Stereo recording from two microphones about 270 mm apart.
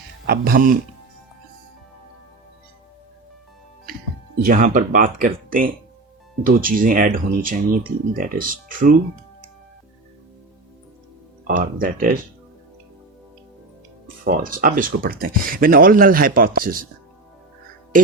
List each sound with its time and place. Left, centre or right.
0.3 s speech: right
4.4 s speech: right
11.4 s speech: right
14.3 s speech: right
17.9 s speech: right